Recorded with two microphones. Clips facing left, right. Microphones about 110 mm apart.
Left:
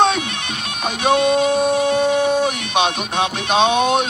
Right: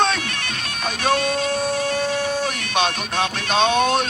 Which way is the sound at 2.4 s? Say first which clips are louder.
Left 4 dB; 15° left (ahead or behind).